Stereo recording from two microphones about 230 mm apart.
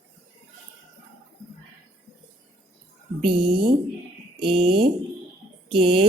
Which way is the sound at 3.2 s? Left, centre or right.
Right.